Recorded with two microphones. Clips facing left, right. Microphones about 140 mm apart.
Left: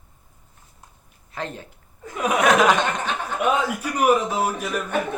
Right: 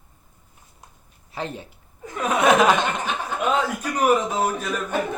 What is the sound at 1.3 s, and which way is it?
Speech, 10° right (ahead or behind).